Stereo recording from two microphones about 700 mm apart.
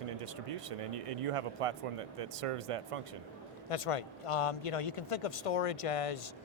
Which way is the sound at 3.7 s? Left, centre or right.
Left.